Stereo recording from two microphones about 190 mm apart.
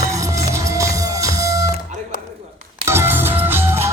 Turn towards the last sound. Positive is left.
turn(degrees=-10)  # may be behind; listen again after turning